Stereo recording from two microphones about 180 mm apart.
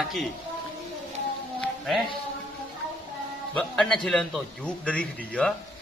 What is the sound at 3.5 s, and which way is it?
A man's voice, 5° left (ahead or behind).